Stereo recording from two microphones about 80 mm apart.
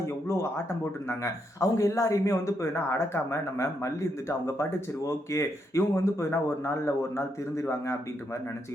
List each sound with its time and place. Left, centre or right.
0.0 s speech: left